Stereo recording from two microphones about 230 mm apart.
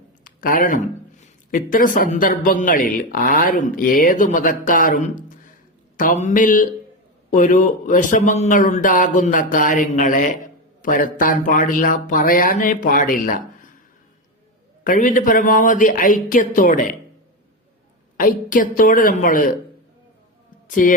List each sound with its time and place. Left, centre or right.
0.3 s a man's voice: left
14.8 s a man's voice: left
18.2 s a man's voice: left
20.7 s speech: left